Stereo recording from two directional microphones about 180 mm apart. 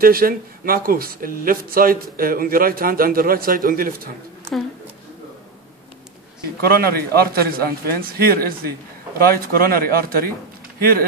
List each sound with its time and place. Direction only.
0.0 s a man's voice: 55° right (ahead or behind)
6.8 s a man's voice: 60° right (ahead or behind)